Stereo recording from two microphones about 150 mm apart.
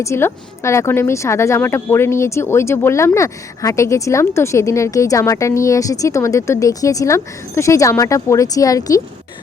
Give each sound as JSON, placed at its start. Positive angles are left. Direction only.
{"t": 0.0, "sound": "speech", "side_deg": 20}